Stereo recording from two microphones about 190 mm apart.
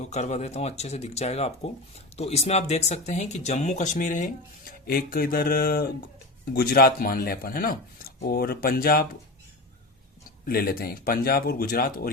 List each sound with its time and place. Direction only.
0.0 s speech: 35° left (ahead or behind)
10.4 s speech: 50° left (ahead or behind)